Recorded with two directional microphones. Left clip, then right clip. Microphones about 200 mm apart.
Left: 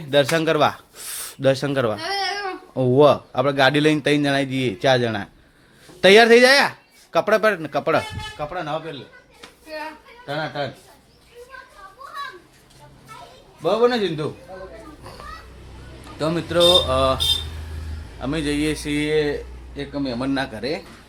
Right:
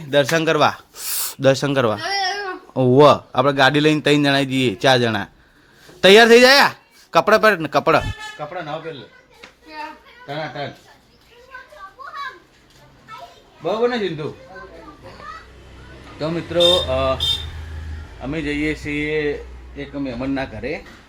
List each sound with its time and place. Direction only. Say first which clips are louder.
0.0 s speech: right 1 dB; 5° right (ahead or behind)
2.7 s a man's voice: right 3 dB; 15° right (ahead or behind)
8.4 s speech: left 2 dB; centre (ahead or behind)
10.2 s speech: left 1 dB; 5° left (ahead or behind)
13.6 s speech: left 2 dB; 5° left (ahead or behind)
16.1 s speech: left 1 dB; 5° left (ahead or behind)
16.6 s speech: even; 15° left (ahead or behind)
18.2 s a man's voice: even; 10° left (ahead or behind)
20.3 s speech: even; 5° left (ahead or behind)